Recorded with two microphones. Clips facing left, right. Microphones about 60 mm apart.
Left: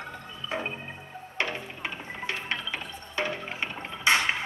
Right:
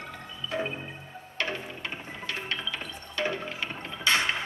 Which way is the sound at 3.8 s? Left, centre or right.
Left.